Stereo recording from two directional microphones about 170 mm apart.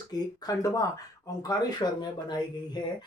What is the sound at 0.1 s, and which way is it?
Speech, 20° left (ahead or behind).